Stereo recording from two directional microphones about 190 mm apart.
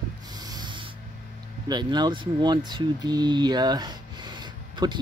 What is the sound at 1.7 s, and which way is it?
Speech, 20° right (ahead or behind).